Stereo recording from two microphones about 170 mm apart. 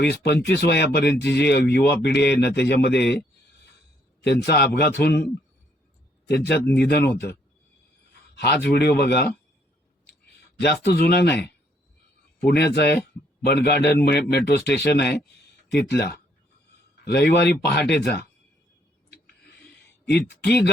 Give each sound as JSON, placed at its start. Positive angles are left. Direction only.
{"t": 0.0, "sound": "speech", "side_deg": 80}
{"t": 4.2, "sound": "speech", "side_deg": 75}
{"t": 6.2, "sound": "speech", "side_deg": 70}
{"t": 8.6, "sound": "speech", "side_deg": 65}
{"t": 10.6, "sound": "speech", "side_deg": 70}
{"t": 12.5, "sound": "speech", "side_deg": 75}
{"t": 17.1, "sound": "speech", "side_deg": 75}
{"t": 20.1, "sound": "speech", "side_deg": 75}